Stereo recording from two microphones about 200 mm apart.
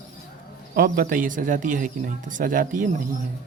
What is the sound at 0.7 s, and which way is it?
Speech, 45° right (ahead or behind).